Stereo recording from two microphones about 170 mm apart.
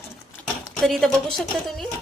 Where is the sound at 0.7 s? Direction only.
Centre (ahead or behind).